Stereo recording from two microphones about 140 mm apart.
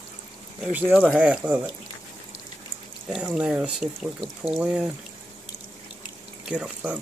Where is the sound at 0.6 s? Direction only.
10° right (ahead or behind).